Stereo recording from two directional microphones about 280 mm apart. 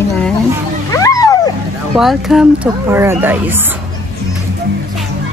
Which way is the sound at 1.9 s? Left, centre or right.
Centre.